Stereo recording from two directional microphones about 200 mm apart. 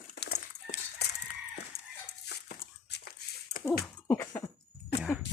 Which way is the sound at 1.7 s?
30° left (ahead or behind).